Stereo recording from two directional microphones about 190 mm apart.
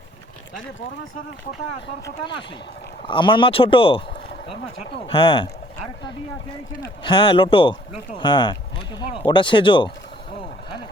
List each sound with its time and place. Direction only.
3.1 s speech: 25° left (ahead or behind)
6.8 s speech: 25° left (ahead or behind)